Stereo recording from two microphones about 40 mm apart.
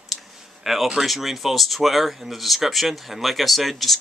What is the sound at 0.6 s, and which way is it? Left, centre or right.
Speech, centre.